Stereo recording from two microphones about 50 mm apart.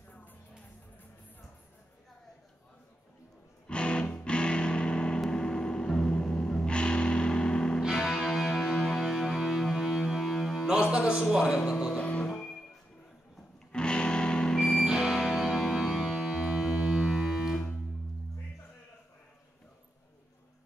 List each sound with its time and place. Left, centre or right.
3.6 s music: left
7.9 s music: centre
10.7 s music: centre
11.3 s speech: centre
12.0 s music: left
13.7 s music: centre
14.9 s music: centre